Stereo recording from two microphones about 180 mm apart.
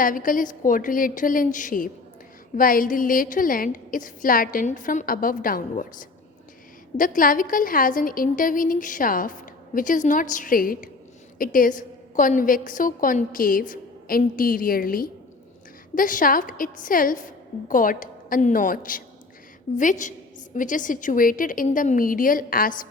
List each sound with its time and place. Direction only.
0.0 s a woman's voice: 50° left (ahead or behind)